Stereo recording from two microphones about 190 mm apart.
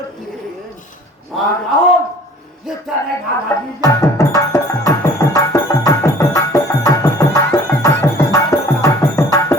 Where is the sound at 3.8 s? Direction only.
15° left (ahead or behind).